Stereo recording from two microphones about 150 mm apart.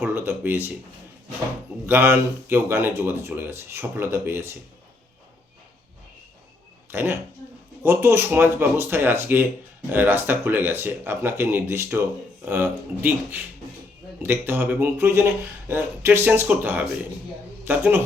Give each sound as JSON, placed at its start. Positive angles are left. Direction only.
{"t": 0.0, "sound": "speech", "side_deg": -10}
{"t": 1.9, "sound": "speech", "side_deg": -15}
{"t": 6.9, "sound": "speech", "side_deg": -15}